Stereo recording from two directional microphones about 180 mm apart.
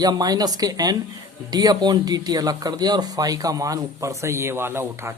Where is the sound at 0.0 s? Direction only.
20° right (ahead or behind).